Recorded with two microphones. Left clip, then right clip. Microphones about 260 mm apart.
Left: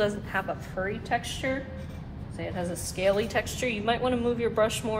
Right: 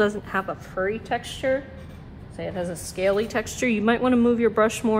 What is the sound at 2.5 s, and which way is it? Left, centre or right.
Speech, right.